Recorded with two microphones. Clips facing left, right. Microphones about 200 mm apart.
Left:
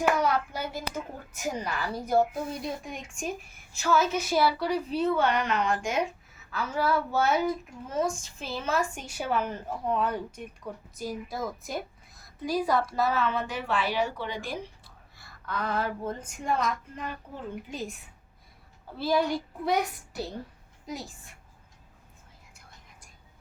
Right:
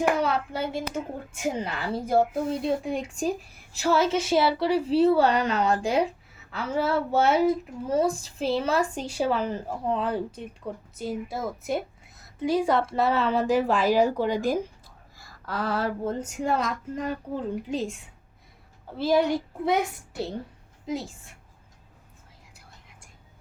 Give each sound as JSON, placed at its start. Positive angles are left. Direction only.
{"t": 0.2, "sound": "a child's voice", "side_deg": -25}
{"t": 12.4, "sound": "a child's voice", "side_deg": -25}
{"t": 15.6, "sound": "speech", "side_deg": -30}
{"t": 18.9, "sound": "a child's voice", "side_deg": -20}